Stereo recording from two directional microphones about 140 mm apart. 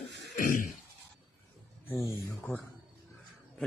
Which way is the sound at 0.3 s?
90° left.